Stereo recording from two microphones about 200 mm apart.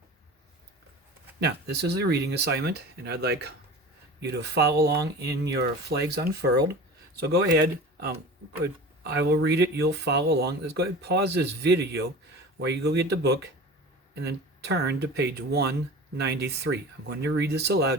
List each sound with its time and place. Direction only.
1.4 s speech: 55° right (ahead or behind)